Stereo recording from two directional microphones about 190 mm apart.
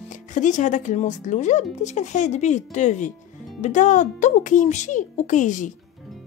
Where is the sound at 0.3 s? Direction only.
40° left (ahead or behind).